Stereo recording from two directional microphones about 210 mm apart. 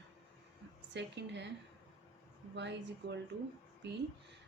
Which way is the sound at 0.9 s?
55° right (ahead or behind).